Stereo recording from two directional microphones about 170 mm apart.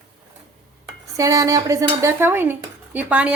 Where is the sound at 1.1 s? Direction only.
20° right (ahead or behind).